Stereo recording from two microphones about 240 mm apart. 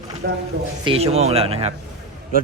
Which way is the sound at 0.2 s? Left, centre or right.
Right.